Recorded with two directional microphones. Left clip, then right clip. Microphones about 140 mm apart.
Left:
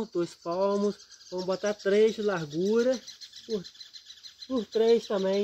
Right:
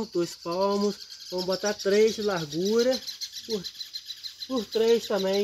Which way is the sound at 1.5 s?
Centre (ahead or behind).